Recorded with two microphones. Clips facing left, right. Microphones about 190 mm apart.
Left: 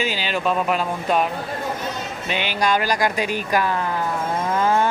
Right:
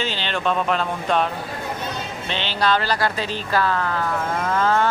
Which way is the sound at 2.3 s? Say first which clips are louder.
Even; 10° left (ahead or behind).